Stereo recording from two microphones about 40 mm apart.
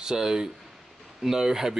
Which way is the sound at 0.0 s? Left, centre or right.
Centre.